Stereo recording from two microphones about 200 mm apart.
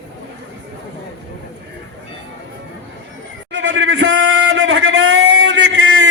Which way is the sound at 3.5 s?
65° right (ahead or behind).